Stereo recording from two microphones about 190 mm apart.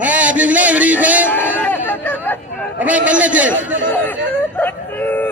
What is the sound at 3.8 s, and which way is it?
Speech, 10° left (ahead or behind).